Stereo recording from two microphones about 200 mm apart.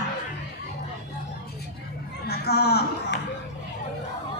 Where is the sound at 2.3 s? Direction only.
55° left (ahead or behind).